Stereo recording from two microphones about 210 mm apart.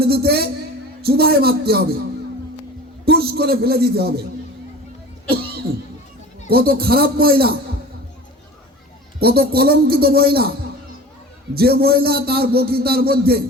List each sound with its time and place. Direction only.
0.0 s a man's voice: 50° right (ahead or behind)
3.1 s a man's voice: 50° right (ahead or behind)
6.5 s a man's voice: 45° right (ahead or behind)
9.2 s a man's voice: 45° right (ahead or behind)
11.5 s a man's voice: 50° right (ahead or behind)